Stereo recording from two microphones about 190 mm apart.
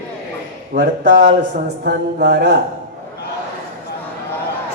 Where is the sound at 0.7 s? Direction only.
45° right (ahead or behind).